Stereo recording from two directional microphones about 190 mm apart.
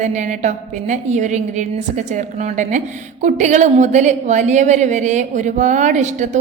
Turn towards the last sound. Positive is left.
turn(degrees=-40)  # may be behind; listen again after turning